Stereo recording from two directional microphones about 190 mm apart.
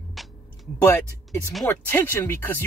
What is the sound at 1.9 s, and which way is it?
Speech, 10° left (ahead or behind).